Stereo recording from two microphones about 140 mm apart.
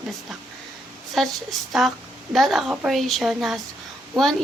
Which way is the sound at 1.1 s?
Centre (ahead or behind).